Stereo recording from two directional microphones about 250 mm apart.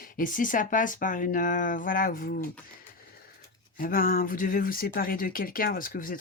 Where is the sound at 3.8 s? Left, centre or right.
Left.